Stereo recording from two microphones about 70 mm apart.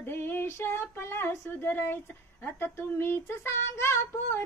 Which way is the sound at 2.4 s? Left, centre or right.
Left.